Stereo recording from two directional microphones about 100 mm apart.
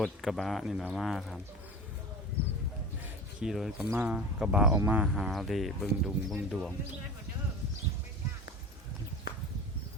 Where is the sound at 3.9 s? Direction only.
15° right (ahead or behind); by 6.3 s centre (ahead or behind).